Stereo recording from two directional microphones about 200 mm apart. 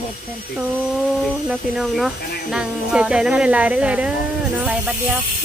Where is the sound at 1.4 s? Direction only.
5° right (ahead or behind).